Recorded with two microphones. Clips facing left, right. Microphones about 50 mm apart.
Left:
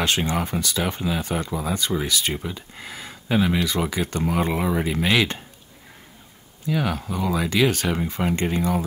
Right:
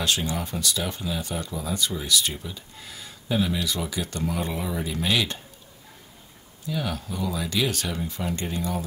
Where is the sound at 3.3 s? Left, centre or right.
Left.